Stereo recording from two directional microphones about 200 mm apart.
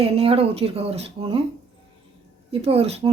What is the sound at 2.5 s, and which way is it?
Speech, 30° right (ahead or behind).